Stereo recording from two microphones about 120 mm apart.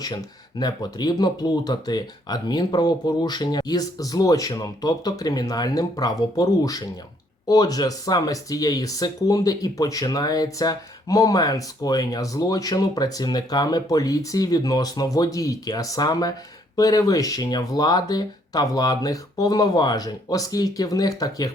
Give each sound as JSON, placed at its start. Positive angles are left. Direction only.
{"t": 0.6, "sound": "speech", "side_deg": 35}